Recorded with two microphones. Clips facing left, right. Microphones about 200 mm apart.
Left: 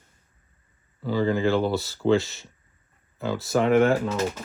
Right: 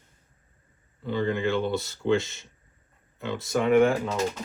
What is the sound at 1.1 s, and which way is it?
Speech, 35° left (ahead or behind).